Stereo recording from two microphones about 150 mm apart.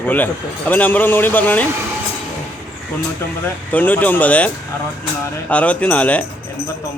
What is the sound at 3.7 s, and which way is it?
Speech, 10° left (ahead or behind).